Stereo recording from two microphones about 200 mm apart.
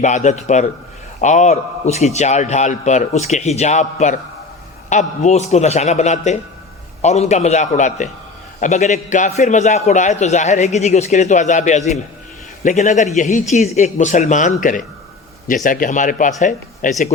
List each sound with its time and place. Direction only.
0.0 s a man's voice: 35° left (ahead or behind)